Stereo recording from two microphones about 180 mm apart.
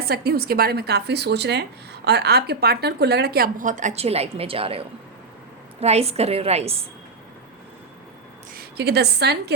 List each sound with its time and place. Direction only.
0.0 s a woman's voice: 60° right (ahead or behind); by 6.7 s 35° right (ahead or behind)
8.5 s a woman's voice: 65° right (ahead or behind)